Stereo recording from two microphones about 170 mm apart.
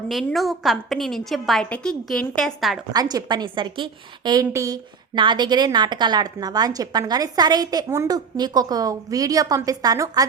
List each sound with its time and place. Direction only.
0.1 s a woman's voice: centre (ahead or behind)
2.9 s a woman's voice: 25° right (ahead or behind)